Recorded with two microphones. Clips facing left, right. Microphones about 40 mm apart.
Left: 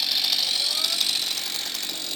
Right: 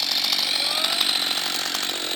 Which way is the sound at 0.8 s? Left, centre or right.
Right.